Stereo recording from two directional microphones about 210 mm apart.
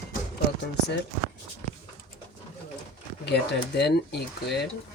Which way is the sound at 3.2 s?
55° left (ahead or behind).